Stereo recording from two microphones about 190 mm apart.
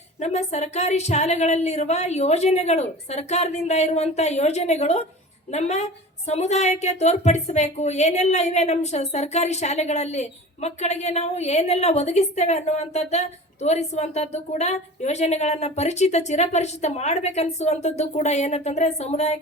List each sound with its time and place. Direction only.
0.2 s a woman's voice: 35° left (ahead or behind)